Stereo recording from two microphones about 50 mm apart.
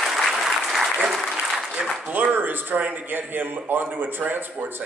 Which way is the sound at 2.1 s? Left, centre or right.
Right.